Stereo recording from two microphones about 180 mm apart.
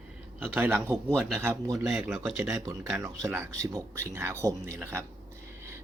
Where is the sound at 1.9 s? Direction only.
5° right (ahead or behind).